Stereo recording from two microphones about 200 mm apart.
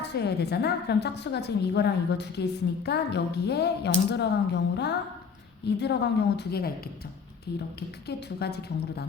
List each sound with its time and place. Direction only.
0.0 s a woman's voice: 55° left (ahead or behind)